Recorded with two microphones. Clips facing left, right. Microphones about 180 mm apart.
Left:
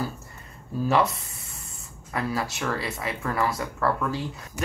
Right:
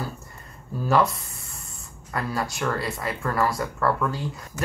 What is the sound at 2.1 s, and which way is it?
Speech, 5° left (ahead or behind).